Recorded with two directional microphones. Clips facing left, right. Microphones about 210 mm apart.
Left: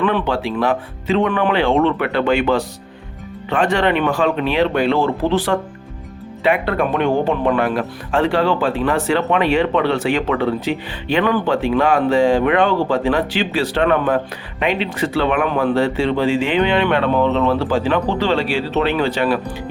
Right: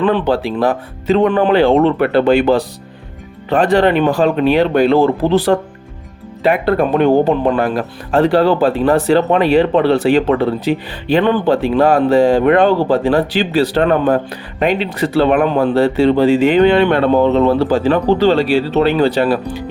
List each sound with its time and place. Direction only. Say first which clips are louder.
0.0 s speech: right 4 dB; 35° right (ahead or behind)